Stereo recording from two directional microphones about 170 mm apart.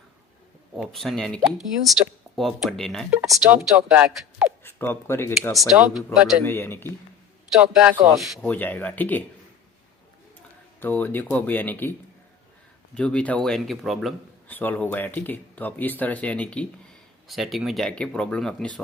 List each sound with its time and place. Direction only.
0.8 s a man's voice: centre (ahead or behind)
4.6 s speech: 10° left (ahead or behind)
5.7 s a man's voice: 10° right (ahead or behind)
6.4 s speech: 15° left (ahead or behind)
7.5 s speech: 5° right (ahead or behind); by 9.2 s 10° left (ahead or behind)
10.8 s a man's voice: 10° left (ahead or behind)
14.5 s a man's voice: 10° left (ahead or behind)